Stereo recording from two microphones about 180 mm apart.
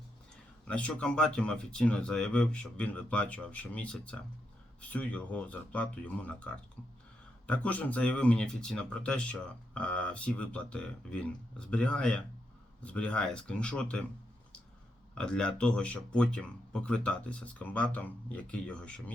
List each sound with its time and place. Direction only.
0.7 s speech: 5° left (ahead or behind)
15.2 s speech: 5° left (ahead or behind)